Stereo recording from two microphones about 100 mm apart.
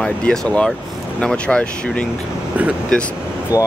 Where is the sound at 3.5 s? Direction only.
35° left (ahead or behind).